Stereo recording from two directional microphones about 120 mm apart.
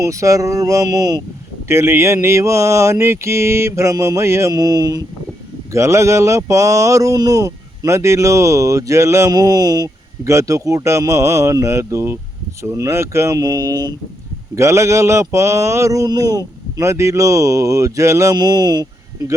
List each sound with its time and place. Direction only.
0.0 s speech: 25° right (ahead or behind)
1.6 s speech: 20° right (ahead or behind)